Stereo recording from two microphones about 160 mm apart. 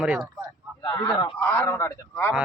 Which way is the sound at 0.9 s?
20° left (ahead or behind).